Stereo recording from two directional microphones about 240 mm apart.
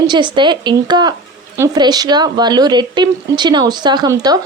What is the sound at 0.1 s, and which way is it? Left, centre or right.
Speech, centre.